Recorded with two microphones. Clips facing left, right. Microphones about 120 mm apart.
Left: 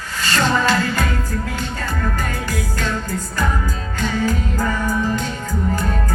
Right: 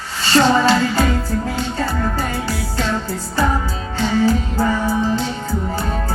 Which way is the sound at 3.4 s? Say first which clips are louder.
Right 5 dB; 35° right (ahead or behind).